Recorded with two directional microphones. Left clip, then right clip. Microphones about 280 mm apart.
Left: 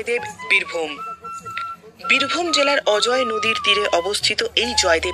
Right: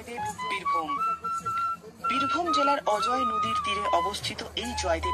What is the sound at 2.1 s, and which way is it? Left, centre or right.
Speech, left.